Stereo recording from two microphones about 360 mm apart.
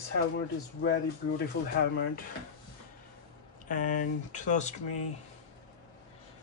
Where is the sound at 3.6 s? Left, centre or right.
Left.